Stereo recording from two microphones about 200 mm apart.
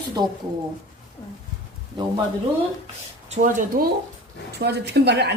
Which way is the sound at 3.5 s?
45° right (ahead or behind).